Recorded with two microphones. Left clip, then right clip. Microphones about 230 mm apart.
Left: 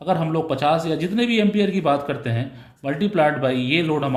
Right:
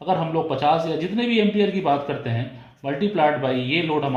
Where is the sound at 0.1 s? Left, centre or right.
Left.